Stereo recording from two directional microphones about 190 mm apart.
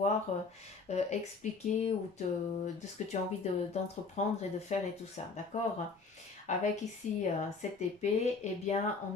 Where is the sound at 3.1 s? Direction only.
35° left (ahead or behind).